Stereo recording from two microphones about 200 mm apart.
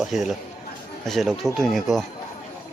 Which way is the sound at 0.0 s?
Centre (ahead or behind).